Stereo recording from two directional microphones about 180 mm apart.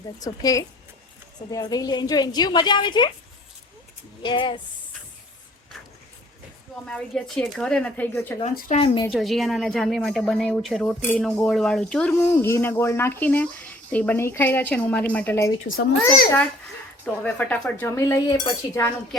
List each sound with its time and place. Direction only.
0.2 s a woman's voice: 20° left (ahead or behind)
4.2 s a woman's voice: 25° left (ahead or behind)
6.8 s a woman's voice: 5° left (ahead or behind)
8.5 s speech: 50° left (ahead or behind)
8.8 s a woman's voice: 30° left (ahead or behind)
9.0 s a woman's voice: centre (ahead or behind)
12.1 s a woman's voice: 15° left (ahead or behind)
17.2 s a woman's voice: 10° left (ahead or behind)